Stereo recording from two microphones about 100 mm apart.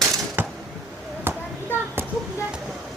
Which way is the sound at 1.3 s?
20° right (ahead or behind).